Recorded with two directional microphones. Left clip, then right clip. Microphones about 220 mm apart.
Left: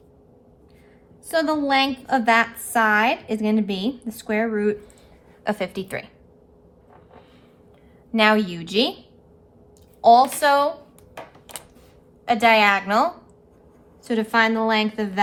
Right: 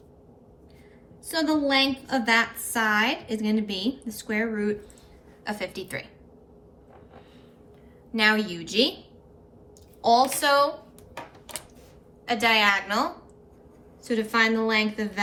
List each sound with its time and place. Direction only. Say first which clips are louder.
1.3 s a woman's voice: left 4 dB; 25° left (ahead or behind)
8.1 s a woman's voice: left 4 dB; 30° left (ahead or behind)
10.0 s a woman's voice: left 6 dB; 25° left (ahead or behind)
12.3 s a woman's voice: left 5 dB; 30° left (ahead or behind)